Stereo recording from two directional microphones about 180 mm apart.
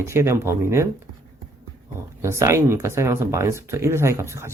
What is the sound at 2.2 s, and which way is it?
Speech, 15° right (ahead or behind).